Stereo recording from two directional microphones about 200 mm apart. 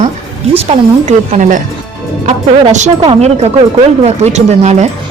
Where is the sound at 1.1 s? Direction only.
40° right (ahead or behind).